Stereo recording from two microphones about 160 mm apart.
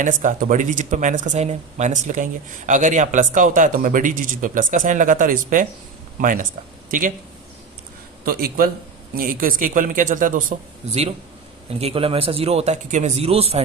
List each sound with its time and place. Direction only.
0.0 s speech: 55° right (ahead or behind)
8.2 s speech: 65° right (ahead or behind)
10.8 s a man's voice: 40° right (ahead or behind)